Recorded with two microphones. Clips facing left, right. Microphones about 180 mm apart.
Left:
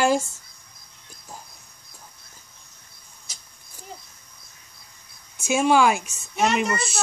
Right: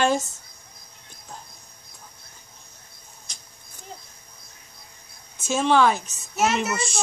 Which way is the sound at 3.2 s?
5° left (ahead or behind).